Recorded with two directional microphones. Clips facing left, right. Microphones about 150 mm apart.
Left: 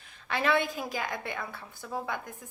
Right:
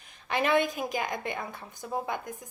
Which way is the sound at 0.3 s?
15° right (ahead or behind).